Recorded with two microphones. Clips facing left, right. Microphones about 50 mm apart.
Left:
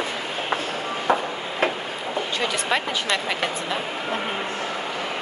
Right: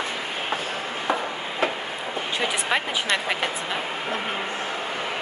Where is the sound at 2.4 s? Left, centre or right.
Centre.